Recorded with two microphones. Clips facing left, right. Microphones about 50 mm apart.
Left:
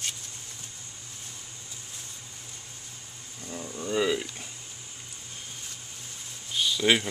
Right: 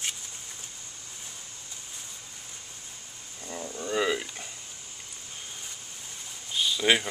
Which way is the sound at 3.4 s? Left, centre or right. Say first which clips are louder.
Even; centre.